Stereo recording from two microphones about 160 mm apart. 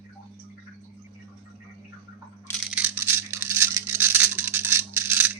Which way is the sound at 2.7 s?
10° right (ahead or behind).